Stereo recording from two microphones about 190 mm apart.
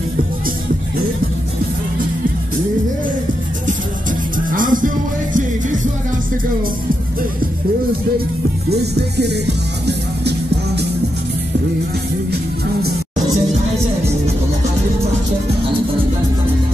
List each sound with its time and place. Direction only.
4.5 s music: 45° right (ahead or behind)
8.6 s music: 60° right (ahead or behind)